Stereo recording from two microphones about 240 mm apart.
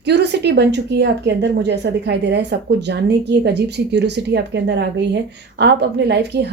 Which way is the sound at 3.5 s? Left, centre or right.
Right.